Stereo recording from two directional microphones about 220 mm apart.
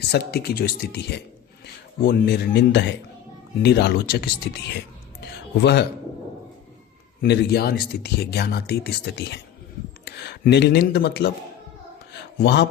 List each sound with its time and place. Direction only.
0.1 s a man's voice: 45° left (ahead or behind)
7.2 s speech: 45° left (ahead or behind)
12.4 s speech: 50° left (ahead or behind)